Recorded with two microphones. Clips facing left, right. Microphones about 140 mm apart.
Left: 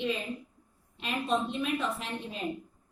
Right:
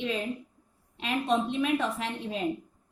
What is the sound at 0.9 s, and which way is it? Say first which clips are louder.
A woman's voice: right 3 dB; 80° right.